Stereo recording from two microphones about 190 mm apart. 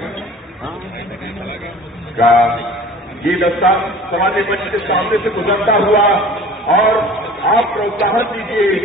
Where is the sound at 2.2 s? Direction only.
Centre (ahead or behind).